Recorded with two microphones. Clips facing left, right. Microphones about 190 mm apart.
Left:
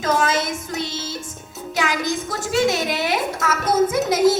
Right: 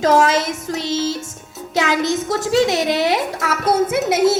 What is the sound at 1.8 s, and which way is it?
A woman's voice, 25° right (ahead or behind).